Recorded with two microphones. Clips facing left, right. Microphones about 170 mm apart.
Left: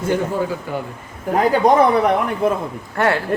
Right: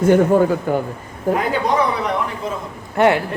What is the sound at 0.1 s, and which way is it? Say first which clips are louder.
Speech: right 7 dB; 55° right (ahead or behind).